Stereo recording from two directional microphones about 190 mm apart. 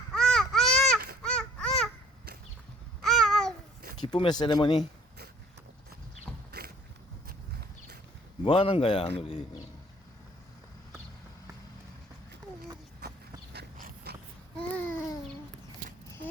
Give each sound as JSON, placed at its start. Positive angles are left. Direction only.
{"t": 0.1, "sound": "baby cry", "side_deg": 5}
{"t": 1.2, "sound": "babbling", "side_deg": 5}
{"t": 3.0, "sound": "babbling", "side_deg": 0}
{"t": 4.0, "sound": "a man's voice", "side_deg": 25}
{"t": 6.5, "sound": "a sound", "side_deg": -55}
{"t": 8.4, "sound": "a man's voice", "side_deg": 30}
{"t": 13.0, "sound": "a sound", "side_deg": -55}
{"t": 14.5, "sound": "babbling", "side_deg": 5}